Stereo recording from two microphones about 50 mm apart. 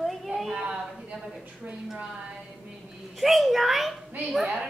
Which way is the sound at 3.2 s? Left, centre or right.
Centre.